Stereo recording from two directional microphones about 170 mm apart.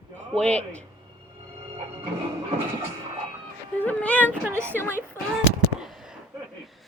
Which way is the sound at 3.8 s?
10° left (ahead or behind).